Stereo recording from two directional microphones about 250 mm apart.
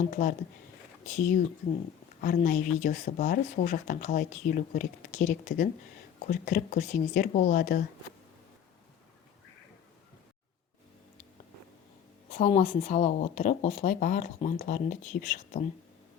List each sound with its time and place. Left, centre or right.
0.1 s a woman's voice: left
12.3 s a woman's voice: left